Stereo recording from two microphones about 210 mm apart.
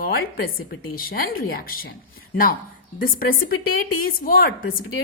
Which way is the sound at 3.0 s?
40° left (ahead or behind).